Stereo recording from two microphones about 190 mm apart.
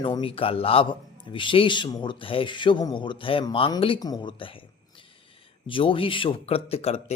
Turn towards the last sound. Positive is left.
turn(degrees=30)  # may be behind; listen again after turning